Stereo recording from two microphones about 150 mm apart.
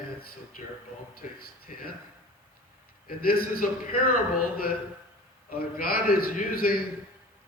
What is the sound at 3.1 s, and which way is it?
A man's voice, 80° left.